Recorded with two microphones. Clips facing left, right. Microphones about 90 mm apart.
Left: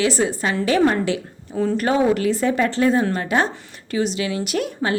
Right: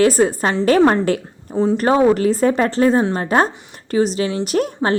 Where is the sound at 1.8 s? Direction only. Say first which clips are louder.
Right 4 dB; 35° right (ahead or behind).